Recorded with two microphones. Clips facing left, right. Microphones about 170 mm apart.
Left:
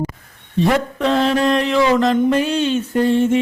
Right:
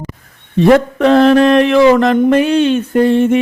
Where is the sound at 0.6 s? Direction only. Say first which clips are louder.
Right 8 dB; 65° right (ahead or behind).